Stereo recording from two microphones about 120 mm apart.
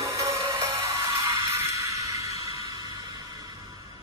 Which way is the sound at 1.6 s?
25° right (ahead or behind).